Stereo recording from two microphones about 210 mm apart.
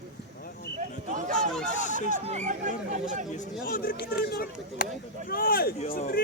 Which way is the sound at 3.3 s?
40° left (ahead or behind).